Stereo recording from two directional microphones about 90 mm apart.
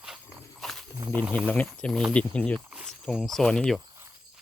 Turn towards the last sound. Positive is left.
turn(degrees=5)  # may be behind; listen again after turning